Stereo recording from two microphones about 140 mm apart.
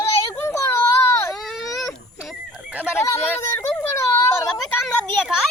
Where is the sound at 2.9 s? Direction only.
20° left (ahead or behind).